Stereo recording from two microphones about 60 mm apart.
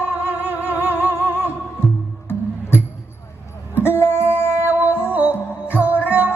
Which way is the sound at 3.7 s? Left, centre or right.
Left.